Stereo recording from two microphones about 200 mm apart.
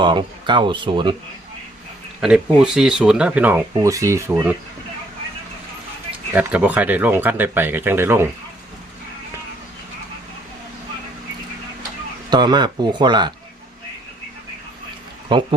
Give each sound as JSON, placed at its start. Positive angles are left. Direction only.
{"t": 0.0, "sound": "speech", "side_deg": -25}
{"t": 2.2, "sound": "speech", "side_deg": -5}
{"t": 6.3, "sound": "speech", "side_deg": -10}
{"t": 12.3, "sound": "speech", "side_deg": -20}
{"t": 15.3, "sound": "speech", "side_deg": -25}